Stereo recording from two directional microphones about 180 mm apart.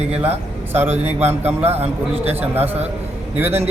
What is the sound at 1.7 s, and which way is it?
Speech, 35° right (ahead or behind).